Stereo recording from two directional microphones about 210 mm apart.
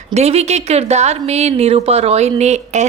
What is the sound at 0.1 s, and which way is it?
Speech, 30° right (ahead or behind).